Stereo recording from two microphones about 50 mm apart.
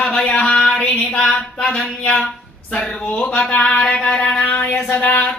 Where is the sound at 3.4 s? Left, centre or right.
Centre.